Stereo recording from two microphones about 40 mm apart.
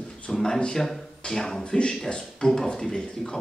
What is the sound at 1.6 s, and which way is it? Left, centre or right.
A man's voice, left.